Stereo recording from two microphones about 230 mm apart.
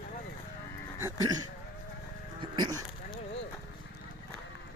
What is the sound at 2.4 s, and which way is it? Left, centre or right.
Goat, centre.